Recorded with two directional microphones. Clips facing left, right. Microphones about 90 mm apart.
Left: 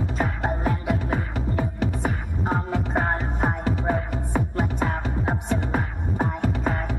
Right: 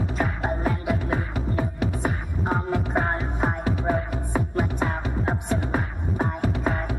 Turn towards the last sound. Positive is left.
turn(degrees=-5)  # may be behind; listen again after turning